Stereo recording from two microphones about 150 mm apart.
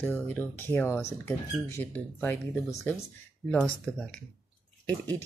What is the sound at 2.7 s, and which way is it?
Speech, 20° left (ahead or behind).